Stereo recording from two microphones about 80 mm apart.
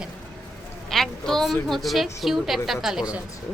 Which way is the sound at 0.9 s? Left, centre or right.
Centre.